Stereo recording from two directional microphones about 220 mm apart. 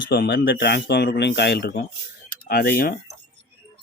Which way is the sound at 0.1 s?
45° left (ahead or behind).